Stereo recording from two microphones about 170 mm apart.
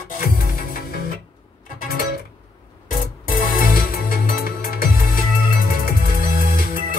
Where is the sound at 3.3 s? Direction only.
55° left (ahead or behind).